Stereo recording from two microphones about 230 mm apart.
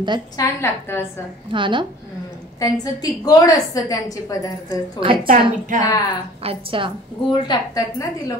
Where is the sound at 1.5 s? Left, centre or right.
Right.